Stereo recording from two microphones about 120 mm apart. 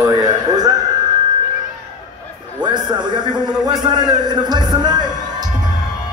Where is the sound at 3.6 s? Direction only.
35° right (ahead or behind).